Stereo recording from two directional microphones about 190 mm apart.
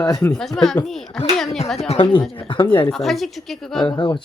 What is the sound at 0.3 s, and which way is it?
Speech, centre (ahead or behind).